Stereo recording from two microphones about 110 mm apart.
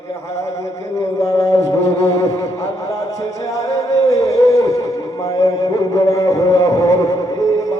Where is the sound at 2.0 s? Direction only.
30° left (ahead or behind).